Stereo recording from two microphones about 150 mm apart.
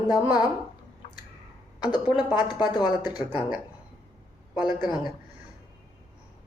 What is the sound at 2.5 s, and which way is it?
Speech, 30° left (ahead or behind).